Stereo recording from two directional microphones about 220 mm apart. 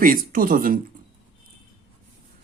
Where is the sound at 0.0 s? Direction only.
40° right (ahead or behind).